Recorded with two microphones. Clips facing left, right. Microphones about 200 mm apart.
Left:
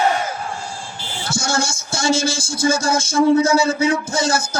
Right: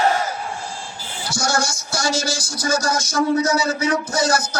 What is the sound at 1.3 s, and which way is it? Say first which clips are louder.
Speech: left 1 dB; 25° left (ahead or behind).